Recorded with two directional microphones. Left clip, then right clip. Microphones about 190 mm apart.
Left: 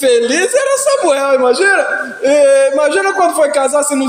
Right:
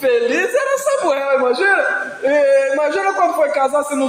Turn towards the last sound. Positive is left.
turn(degrees=40)  # may be behind; listen again after turning